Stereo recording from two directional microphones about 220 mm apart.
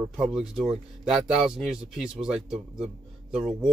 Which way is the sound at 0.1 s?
Centre (ahead or behind).